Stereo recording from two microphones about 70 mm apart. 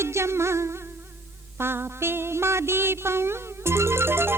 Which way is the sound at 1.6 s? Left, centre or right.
Right.